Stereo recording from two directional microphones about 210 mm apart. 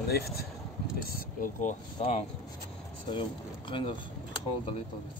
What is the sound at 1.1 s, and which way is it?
Speech, 40° left (ahead or behind).